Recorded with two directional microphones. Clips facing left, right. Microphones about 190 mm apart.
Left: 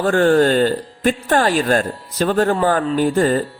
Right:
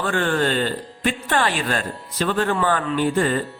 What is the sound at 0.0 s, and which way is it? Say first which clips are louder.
Speech: left 8 dB; 40° left (ahead or behind).